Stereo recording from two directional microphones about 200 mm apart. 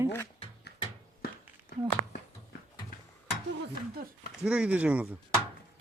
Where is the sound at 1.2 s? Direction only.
50° left (ahead or behind).